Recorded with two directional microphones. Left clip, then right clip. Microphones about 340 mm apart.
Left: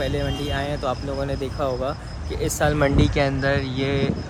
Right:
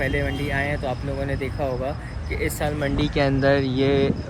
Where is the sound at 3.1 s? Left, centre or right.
Centre.